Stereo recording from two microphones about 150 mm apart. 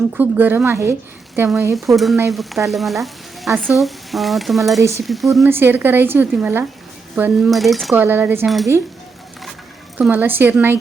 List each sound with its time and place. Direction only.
0.1 s a woman's voice: 10° right (ahead or behind)
1.7 s speech: centre (ahead or behind)
2.3 s frying: centre (ahead or behind)
3.6 s speech: centre (ahead or behind)
4.8 s speech: 20° right (ahead or behind)
5.0 s speech: centre (ahead or behind)
5.5 s a woman's voice: 15° right (ahead or behind)
7.9 s a woman's voice: 15° right (ahead or behind)
10.0 s a woman's voice: 10° right (ahead or behind)